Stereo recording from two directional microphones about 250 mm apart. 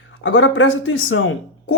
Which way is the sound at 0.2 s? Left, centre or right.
Left.